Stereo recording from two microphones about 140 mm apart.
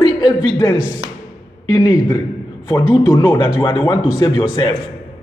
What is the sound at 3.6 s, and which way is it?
A man's voice, 35° left (ahead or behind).